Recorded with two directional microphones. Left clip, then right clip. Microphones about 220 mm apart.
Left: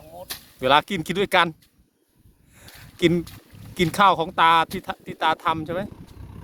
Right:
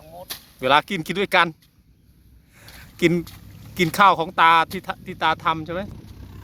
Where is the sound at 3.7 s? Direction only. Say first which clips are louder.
Right 2 dB; 5° left (ahead or behind).